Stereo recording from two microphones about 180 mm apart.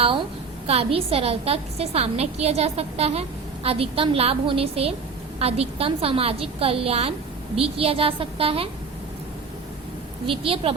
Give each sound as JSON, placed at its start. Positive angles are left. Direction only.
{"t": 0.7, "sound": "a woman's voice", "side_deg": -35}
{"t": 10.2, "sound": "a woman's voice", "side_deg": -30}